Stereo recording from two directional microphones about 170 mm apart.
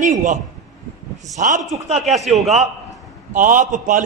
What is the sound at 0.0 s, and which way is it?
A man's voice, 50° right (ahead or behind).